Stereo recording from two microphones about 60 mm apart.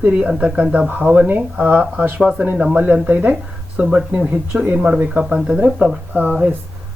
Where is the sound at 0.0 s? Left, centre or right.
Centre.